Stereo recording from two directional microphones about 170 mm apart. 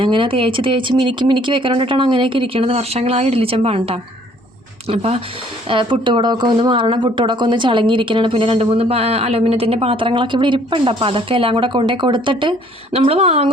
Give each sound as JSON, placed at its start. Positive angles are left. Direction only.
{"t": 0.0, "sound": "speech", "side_deg": -30}